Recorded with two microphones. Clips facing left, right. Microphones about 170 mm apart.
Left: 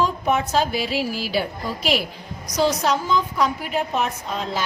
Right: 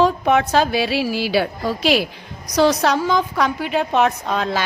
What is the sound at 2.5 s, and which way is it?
Music, 70° right (ahead or behind).